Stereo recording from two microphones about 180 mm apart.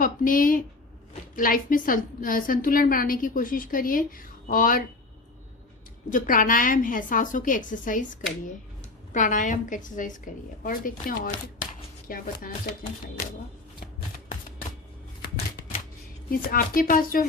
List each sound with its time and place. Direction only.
0.0 s a woman's voice: 50° left (ahead or behind)
6.1 s a woman's voice: 50° left (ahead or behind)
16.3 s a woman's voice: 55° left (ahead or behind)